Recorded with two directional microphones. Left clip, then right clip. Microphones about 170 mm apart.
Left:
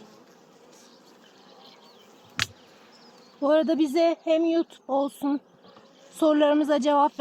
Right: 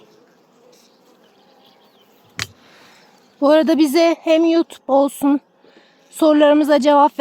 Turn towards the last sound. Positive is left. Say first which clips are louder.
# right 9 dB
turn(degrees=-60)  # may be behind; listen again after turning